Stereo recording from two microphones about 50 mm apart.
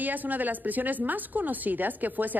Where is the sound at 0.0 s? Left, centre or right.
Right.